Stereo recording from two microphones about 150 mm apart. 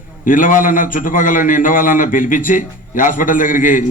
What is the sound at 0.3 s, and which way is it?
A man's voice, 65° left (ahead or behind).